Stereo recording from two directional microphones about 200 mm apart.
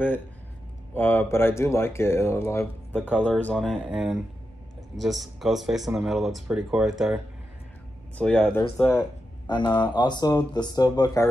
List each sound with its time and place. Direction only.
0.9 s speech: 10° left (ahead or behind)
8.2 s speech: 5° left (ahead or behind)
9.5 s speech: 20° left (ahead or behind)